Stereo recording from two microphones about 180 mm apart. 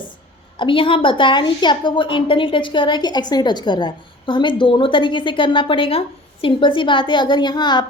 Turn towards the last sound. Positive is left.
turn(degrees=25)  # may be behind; listen again after turning